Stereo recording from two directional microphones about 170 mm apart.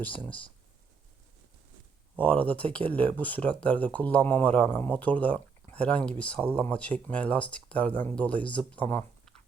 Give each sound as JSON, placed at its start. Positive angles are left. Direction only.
{"t": 2.1, "sound": "speech", "side_deg": 10}